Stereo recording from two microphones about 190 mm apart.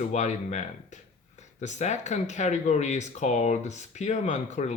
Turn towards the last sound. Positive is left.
turn(degrees=40)  # may be behind; listen again after turning